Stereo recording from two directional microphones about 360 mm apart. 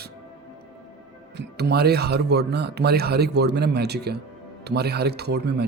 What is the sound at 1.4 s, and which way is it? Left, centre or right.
Speech, right.